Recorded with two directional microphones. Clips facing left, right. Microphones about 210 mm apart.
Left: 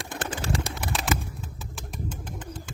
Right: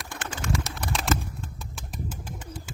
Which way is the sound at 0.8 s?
Centre (ahead or behind).